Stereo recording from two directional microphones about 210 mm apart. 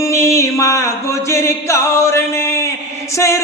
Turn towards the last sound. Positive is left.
turn(degrees=15)  # may be behind; listen again after turning